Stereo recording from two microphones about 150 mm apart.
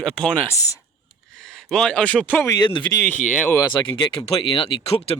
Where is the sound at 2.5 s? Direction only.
30° left (ahead or behind).